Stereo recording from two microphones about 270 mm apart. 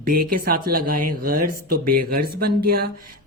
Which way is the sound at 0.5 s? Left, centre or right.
Right.